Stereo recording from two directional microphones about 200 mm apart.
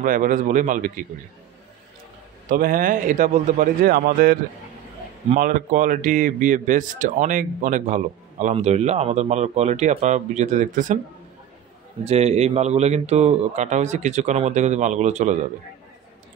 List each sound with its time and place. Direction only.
0.0 s speech: 45° right (ahead or behind)
2.4 s a man's voice: 45° right (ahead or behind)
12.0 s speech: 30° right (ahead or behind)